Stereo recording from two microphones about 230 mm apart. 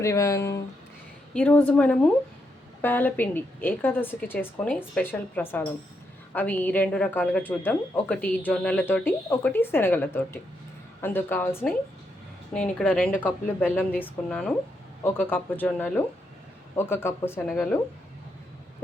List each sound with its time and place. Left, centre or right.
0.0 s speech: centre